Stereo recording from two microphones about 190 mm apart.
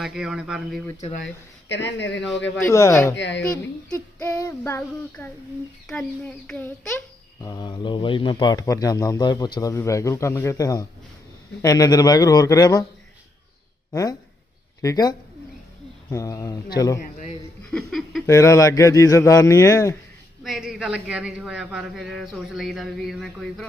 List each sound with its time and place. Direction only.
0.0 s a man's voice: centre (ahead or behind)
1.6 s speech: 70° left (ahead or behind)
2.6 s a man's voice: 15° left (ahead or behind)
3.2 s speech: 70° left (ahead or behind)
3.9 s a man's voice: 15° left (ahead or behind)
7.4 s speech: 20° left (ahead or behind)
13.9 s a man's voice: 20° left (ahead or behind)
17.0 s a sound: 40° left (ahead or behind)
17.7 s a sound: centre (ahead or behind)
18.3 s a man's voice: 15° left (ahead or behind)
20.4 s a man's voice: centre (ahead or behind)